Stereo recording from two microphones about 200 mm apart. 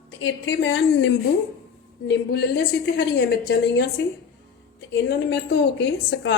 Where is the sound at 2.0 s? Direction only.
55° left (ahead or behind).